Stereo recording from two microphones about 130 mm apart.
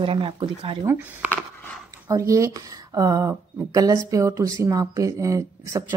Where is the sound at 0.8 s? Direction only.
20° right (ahead or behind).